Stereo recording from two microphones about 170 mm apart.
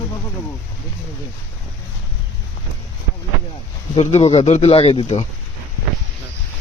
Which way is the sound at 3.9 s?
40° left (ahead or behind).